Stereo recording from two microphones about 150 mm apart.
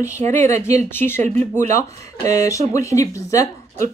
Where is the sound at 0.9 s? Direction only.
15° left (ahead or behind).